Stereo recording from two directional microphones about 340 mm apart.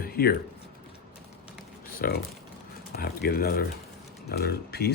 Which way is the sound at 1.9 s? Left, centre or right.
Left.